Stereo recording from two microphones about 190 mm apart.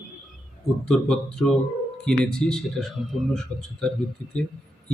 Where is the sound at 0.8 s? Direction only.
5° left (ahead or behind).